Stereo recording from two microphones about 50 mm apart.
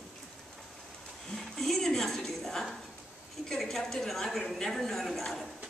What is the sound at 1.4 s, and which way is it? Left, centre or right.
A woman's voice, centre.